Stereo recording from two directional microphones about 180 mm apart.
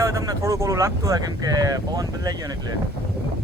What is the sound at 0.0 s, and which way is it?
Speech, 20° right (ahead or behind).